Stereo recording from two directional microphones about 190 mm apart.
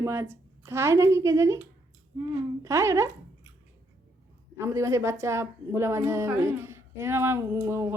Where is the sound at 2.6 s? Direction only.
15° right (ahead or behind).